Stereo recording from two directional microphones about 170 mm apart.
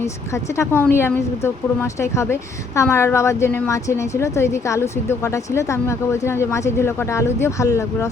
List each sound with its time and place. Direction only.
0.5 s a woman's voice: 15° left (ahead or behind)